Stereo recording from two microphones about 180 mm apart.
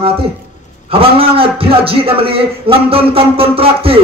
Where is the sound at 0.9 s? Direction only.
30° right (ahead or behind).